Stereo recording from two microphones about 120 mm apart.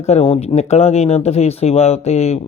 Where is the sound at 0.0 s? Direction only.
60° left (ahead or behind).